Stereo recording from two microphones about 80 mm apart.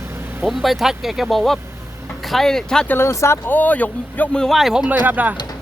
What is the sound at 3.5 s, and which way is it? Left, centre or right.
Speech, left.